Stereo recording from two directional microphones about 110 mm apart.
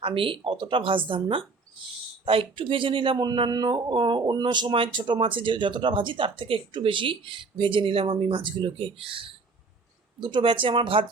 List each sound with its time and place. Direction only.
0.0 s speech: 55° right (ahead or behind)